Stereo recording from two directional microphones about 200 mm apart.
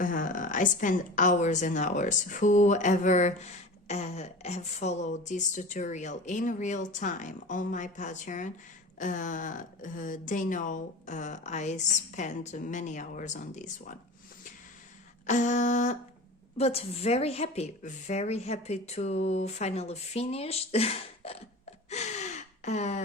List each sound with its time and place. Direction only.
0.0 s a woman's voice: 40° left (ahead or behind)
15.3 s a woman's voice: 40° left (ahead or behind)
21.8 s gasp: 35° left (ahead or behind)